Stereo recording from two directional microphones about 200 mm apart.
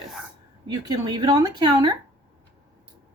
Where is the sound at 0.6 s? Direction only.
20° right (ahead or behind).